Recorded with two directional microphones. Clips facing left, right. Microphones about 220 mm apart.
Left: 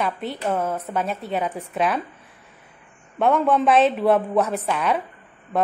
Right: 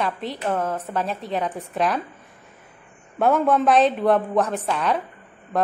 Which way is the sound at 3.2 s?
Centre (ahead or behind).